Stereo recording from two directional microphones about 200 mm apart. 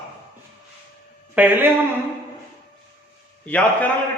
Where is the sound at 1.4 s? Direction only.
10° right (ahead or behind).